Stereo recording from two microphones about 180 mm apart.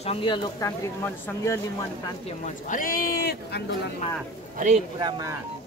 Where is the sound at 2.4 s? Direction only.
45° left (ahead or behind).